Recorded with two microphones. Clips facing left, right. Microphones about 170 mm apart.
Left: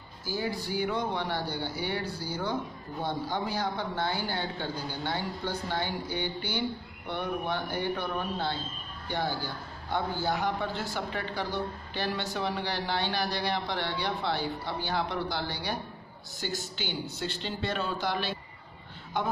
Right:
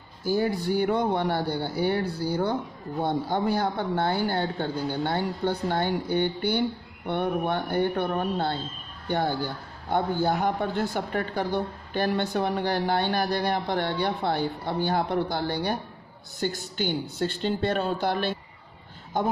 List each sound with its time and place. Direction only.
0.2 s a man's voice: 55° right (ahead or behind)